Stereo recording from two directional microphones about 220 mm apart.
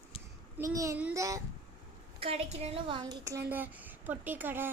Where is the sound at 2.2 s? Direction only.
25° right (ahead or behind).